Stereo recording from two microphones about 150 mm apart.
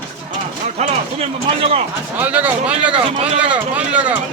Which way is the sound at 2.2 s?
10° right (ahead or behind).